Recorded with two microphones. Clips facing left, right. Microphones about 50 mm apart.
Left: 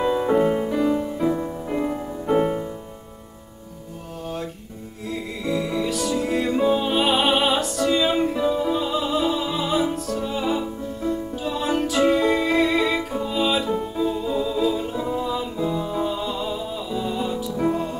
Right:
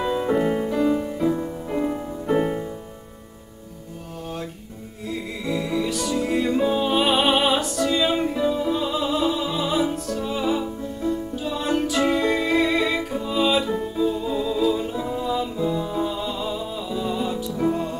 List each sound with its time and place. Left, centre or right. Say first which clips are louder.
0.0 s music: left 2 dB; centre
5.0 s music: left 1 dB; centre